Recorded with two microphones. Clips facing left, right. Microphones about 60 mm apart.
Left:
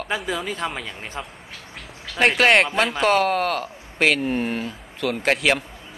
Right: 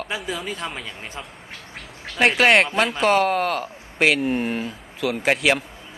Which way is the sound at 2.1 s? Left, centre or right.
Centre.